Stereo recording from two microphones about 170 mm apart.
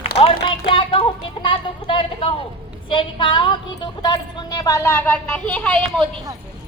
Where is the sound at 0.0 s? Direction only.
35° left (ahead or behind).